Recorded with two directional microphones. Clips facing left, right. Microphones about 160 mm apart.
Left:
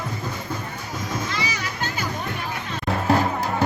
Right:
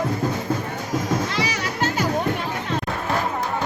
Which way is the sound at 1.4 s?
75° right (ahead or behind).